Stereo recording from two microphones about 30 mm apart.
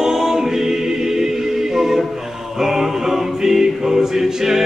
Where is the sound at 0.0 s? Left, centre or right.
Centre.